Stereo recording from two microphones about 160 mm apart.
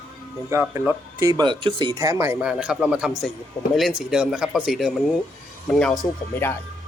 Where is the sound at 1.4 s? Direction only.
30° right (ahead or behind).